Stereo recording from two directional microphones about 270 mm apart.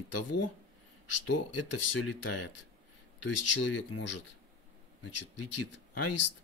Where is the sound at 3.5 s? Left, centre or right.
Left.